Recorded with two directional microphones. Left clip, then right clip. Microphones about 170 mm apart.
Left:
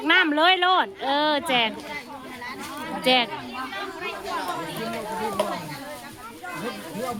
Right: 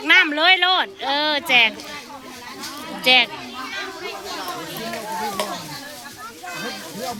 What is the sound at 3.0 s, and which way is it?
Speech, 25° left (ahead or behind).